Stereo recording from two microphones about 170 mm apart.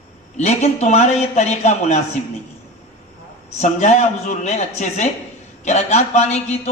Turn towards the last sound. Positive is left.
turn(degrees=40)  # may be behind; listen again after turning